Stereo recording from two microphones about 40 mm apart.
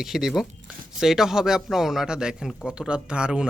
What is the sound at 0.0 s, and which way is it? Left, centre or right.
Speech, centre.